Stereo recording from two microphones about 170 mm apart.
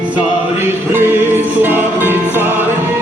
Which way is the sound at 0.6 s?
10° right (ahead or behind).